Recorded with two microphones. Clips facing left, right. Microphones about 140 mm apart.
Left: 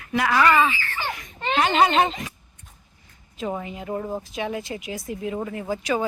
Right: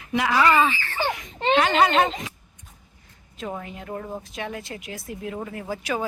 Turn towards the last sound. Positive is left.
turn(degrees=0)  # may be behind; listen again after turning